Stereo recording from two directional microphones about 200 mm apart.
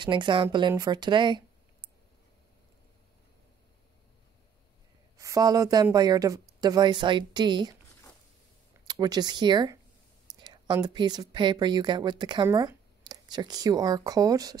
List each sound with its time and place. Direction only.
0.0 s speech: 25° right (ahead or behind)
5.1 s speech: 15° right (ahead or behind)
8.8 s a woman's voice: 20° right (ahead or behind)